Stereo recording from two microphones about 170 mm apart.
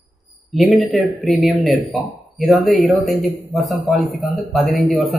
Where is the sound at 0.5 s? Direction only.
Centre (ahead or behind).